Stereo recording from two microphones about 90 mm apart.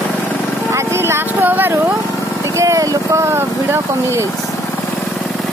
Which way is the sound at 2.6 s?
40° right (ahead or behind).